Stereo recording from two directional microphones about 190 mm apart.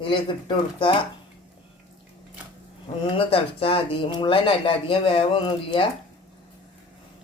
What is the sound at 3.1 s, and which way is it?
Speech, 30° left (ahead or behind).